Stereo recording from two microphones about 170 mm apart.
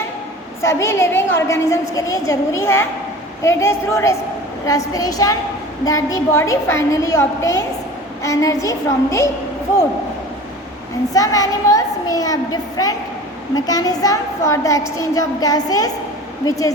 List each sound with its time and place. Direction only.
0.6 s a woman's voice: 15° left (ahead or behind)
11.1 s a child's voice: 20° left (ahead or behind)